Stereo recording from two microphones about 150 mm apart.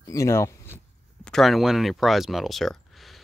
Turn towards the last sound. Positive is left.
turn(degrees=0)  # may be behind; listen again after turning